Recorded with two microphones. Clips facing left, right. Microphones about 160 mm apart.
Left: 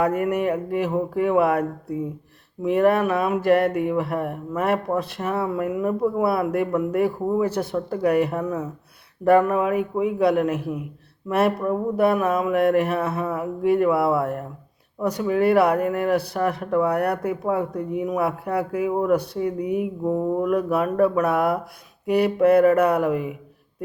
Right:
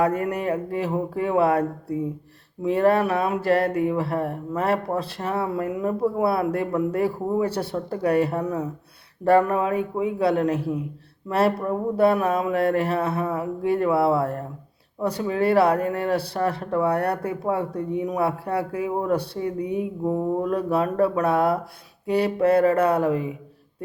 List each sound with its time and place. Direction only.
0.0 s speech: 35° right (ahead or behind)
2.6 s speech: 30° right (ahead or behind)